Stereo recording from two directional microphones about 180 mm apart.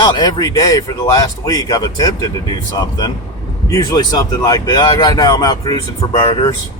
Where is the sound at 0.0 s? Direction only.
25° left (ahead or behind).